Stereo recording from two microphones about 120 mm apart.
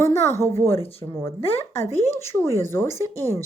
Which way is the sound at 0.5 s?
20° left (ahead or behind).